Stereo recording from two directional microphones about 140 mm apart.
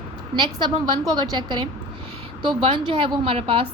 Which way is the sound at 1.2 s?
35° right (ahead or behind).